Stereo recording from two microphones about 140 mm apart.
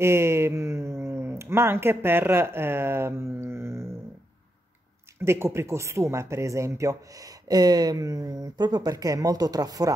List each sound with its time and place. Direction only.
0.0 s speech: 20° right (ahead or behind)
5.2 s speech: 20° right (ahead or behind)